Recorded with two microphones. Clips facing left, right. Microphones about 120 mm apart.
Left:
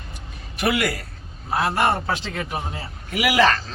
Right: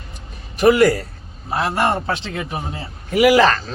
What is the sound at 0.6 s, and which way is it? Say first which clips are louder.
Speech: right 10 dB; 35° right (ahead or behind).